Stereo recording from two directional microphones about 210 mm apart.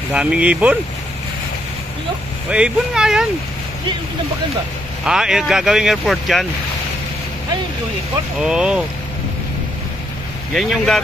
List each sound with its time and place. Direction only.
0.1 s speech: 5° right (ahead or behind)
2.5 s speech: 5° right (ahead or behind)
5.0 s speech: 5° right (ahead or behind)
8.4 s speech: 5° right (ahead or behind)
10.5 s speech: centre (ahead or behind)